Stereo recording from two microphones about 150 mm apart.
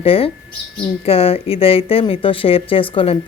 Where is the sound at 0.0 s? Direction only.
40° left (ahead or behind).